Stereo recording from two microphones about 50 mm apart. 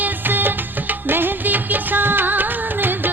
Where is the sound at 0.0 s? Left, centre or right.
Right.